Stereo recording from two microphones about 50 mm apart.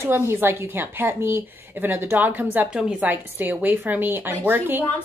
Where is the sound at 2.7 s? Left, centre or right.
Centre.